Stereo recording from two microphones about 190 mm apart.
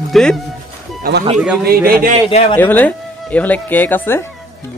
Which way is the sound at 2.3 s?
30° left (ahead or behind).